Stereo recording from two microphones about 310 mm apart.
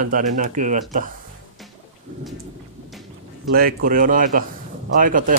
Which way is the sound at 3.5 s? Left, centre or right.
Right.